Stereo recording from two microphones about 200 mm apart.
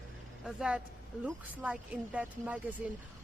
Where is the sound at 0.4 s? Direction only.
5° right (ahead or behind).